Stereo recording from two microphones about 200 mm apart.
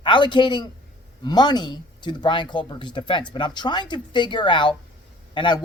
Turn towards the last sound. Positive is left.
turn(degrees=25)  # may be behind; listen again after turning